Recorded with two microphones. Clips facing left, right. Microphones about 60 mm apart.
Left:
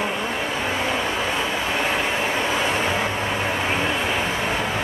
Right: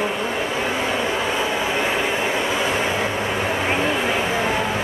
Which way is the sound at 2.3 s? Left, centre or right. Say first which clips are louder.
Right 1 dB; centre.